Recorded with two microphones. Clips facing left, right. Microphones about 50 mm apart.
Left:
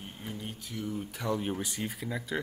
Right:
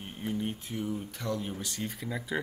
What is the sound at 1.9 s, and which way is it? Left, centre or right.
Speech, centre.